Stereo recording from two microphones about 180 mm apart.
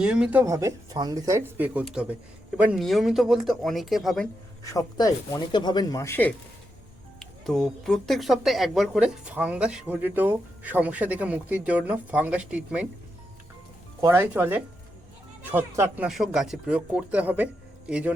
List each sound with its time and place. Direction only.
0.0 s speech: 5° right (ahead or behind)
4.6 s speech: 20° left (ahead or behind)
7.2 s speech: centre (ahead or behind)
14.0 s speech: 10° right (ahead or behind)
16.0 s speech: centre (ahead or behind)